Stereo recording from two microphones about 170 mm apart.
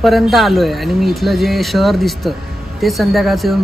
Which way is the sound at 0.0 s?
Centre (ahead or behind).